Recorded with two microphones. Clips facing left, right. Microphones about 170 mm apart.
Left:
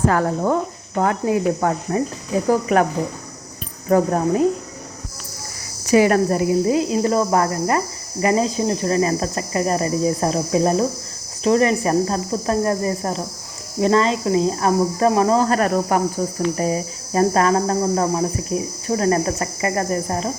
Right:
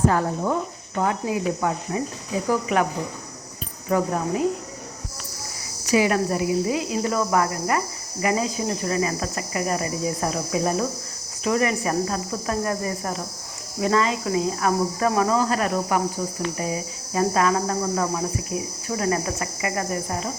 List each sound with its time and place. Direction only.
0.1 s speech: 65° left (ahead or behind); by 2.8 s 45° left (ahead or behind)
3.8 s speech: 45° left (ahead or behind)
5.9 s speech: 50° left (ahead or behind); by 15.4 s 35° left (ahead or behind)
15.4 s speech: 50° left (ahead or behind); by 18.7 s 30° left (ahead or behind)
18.9 s speech: 45° left (ahead or behind)